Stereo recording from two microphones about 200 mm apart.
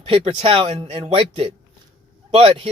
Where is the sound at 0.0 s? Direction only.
30° right (ahead or behind).